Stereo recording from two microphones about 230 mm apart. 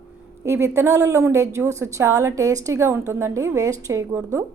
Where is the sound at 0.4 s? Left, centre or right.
Centre.